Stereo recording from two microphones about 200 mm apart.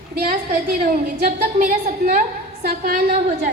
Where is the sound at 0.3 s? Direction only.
45° right (ahead or behind).